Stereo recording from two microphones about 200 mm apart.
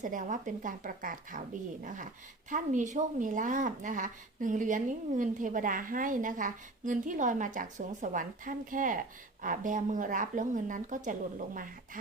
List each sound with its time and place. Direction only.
0.0 s speech: 40° right (ahead or behind)